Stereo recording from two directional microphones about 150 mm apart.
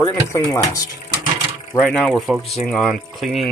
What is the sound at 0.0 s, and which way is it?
Speech, 20° left (ahead or behind).